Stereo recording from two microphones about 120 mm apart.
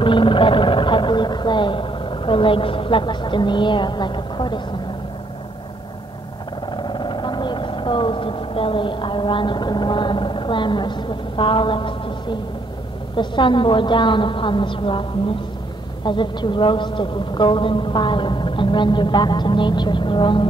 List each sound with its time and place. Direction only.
0.0 s speech: 45° left (ahead or behind)
6.8 s vehicle: 40° left (ahead or behind)
13.1 s a woman's voice: 45° left (ahead or behind)